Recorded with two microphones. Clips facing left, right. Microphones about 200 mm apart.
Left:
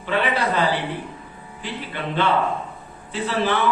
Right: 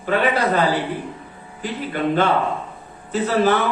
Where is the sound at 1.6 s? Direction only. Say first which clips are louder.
Right 7 dB; 45° right (ahead or behind).